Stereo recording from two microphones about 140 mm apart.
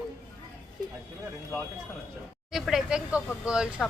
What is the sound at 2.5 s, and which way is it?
Speech, 5° right (ahead or behind).